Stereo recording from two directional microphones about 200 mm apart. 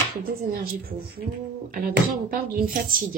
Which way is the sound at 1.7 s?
45° right (ahead or behind).